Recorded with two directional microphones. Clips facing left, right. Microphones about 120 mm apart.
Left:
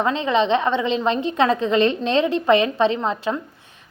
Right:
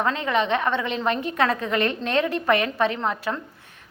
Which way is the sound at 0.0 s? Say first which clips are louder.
Left 4 dB; 20° left (ahead or behind).